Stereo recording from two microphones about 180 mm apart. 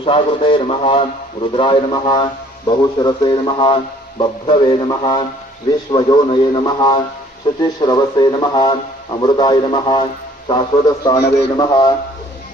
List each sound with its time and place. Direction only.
0.0 s a man's voice: 25° left (ahead or behind)